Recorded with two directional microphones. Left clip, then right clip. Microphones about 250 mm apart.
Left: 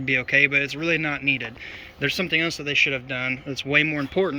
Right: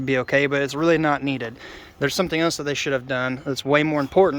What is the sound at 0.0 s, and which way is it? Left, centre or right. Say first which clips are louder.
Speech: left 1 dB; right.